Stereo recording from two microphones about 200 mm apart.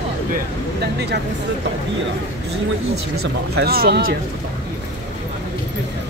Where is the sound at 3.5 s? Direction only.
50° right (ahead or behind).